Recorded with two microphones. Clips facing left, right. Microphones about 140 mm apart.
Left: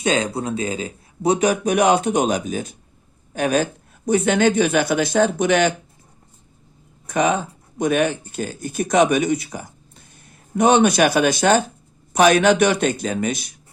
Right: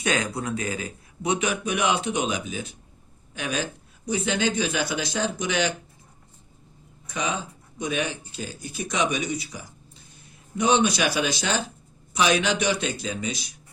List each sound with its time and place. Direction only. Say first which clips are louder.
0.0 s speech: left 5 dB; 25° left (ahead or behind); by 5.7 s 55° left (ahead or behind)
7.1 s a man's voice: left 10 dB; 55° left (ahead or behind)